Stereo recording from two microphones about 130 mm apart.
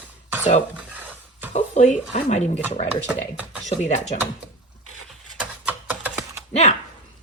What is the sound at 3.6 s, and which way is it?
Speech, 70° left (ahead or behind).